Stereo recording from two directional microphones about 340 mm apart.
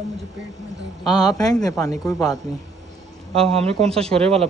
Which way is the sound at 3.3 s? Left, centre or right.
Centre.